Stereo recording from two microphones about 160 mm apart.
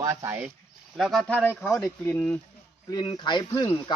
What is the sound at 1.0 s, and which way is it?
Speech, centre (ahead or behind).